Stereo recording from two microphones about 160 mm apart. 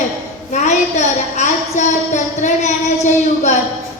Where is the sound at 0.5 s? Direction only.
50° left (ahead or behind).